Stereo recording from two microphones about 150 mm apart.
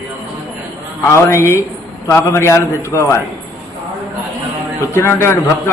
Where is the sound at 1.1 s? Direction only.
20° left (ahead or behind).